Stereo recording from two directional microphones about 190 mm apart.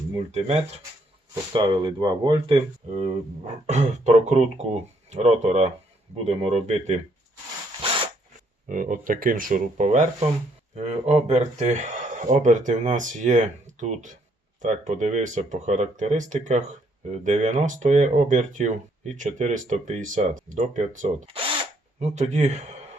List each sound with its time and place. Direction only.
0.3 s speech: 35° right (ahead or behind)
1.3 s speech: 25° right (ahead or behind)
7.8 s zipper: 30° right (ahead or behind)
8.6 s speech: 45° right (ahead or behind)